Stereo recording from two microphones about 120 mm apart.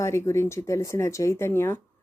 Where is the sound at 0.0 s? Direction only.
25° left (ahead or behind).